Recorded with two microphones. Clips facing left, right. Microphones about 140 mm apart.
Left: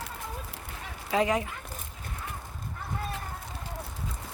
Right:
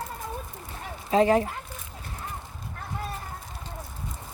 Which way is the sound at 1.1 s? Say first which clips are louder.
Right 6 dB; 35° right (ahead or behind).